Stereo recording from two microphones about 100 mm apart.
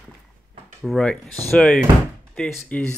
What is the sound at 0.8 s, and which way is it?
Speech, 5° right (ahead or behind).